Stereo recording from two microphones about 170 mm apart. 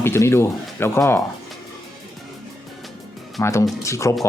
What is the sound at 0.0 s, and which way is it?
Speech, 15° left (ahead or behind).